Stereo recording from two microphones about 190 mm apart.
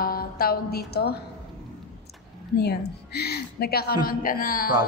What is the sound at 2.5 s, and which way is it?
A woman's voice, 60° left (ahead or behind).